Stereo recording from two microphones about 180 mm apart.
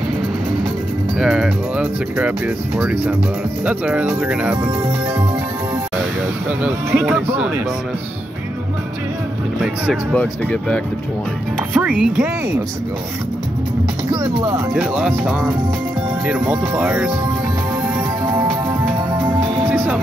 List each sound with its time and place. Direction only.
1.2 s speech: centre (ahead or behind)
6.6 s speech: 5° right (ahead or behind)
10.1 s speech: 5° left (ahead or behind)
11.7 s speech: 5° right (ahead or behind)
14.2 s speech: 25° right (ahead or behind)
14.7 s speech: 5° right (ahead or behind)
18.2 s music: 25° right (ahead or behind)